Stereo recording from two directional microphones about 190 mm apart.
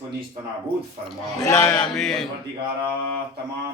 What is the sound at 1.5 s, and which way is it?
Speech, 15° left (ahead or behind).